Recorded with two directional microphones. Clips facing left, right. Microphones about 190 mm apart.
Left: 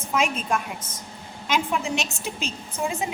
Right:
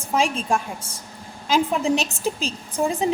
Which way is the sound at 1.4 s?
35° right (ahead or behind).